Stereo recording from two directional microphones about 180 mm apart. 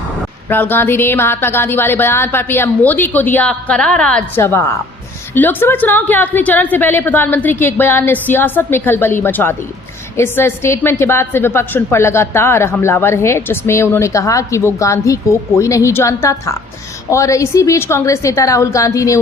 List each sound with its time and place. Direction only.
0.4 s a woman's voice: 10° left (ahead or behind)